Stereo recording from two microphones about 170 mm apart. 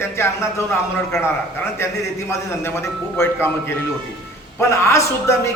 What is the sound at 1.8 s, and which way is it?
A man's voice, 15° left (ahead or behind).